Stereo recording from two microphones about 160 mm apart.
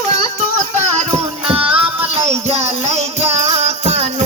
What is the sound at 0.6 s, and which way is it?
Music, 50° right (ahead or behind).